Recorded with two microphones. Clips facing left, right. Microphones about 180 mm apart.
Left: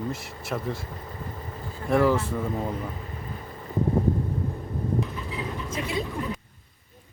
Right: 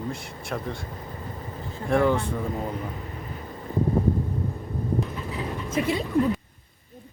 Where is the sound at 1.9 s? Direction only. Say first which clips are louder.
Even; centre (ahead or behind).